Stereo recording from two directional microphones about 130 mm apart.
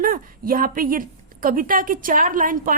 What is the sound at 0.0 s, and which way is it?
A woman's voice, 90° right.